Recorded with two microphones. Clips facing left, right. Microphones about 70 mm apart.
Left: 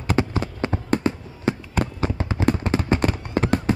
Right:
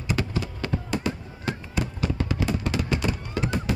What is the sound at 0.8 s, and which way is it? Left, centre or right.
Fireworks, left.